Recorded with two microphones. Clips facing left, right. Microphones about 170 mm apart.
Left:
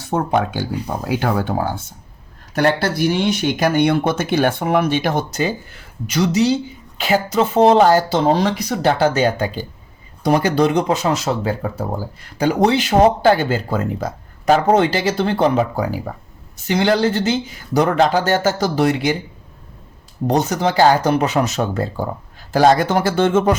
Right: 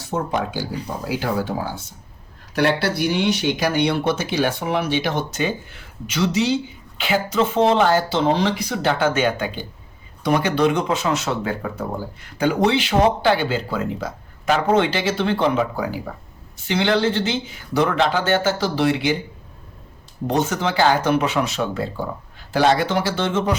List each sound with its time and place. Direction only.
0.1 s speech: 60° left (ahead or behind); by 19.1 s 45° left (ahead or behind)
20.2 s speech: 40° left (ahead or behind)